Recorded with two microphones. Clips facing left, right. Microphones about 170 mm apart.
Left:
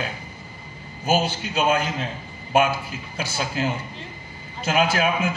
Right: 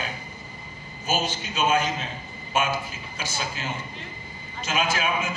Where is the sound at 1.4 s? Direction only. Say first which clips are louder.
Left 2 dB; 60° left (ahead or behind).